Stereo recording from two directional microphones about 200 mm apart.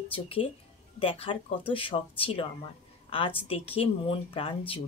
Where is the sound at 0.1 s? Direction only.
25° left (ahead or behind).